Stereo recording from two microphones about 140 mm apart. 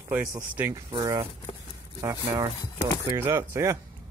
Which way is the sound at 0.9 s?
30° right (ahead or behind).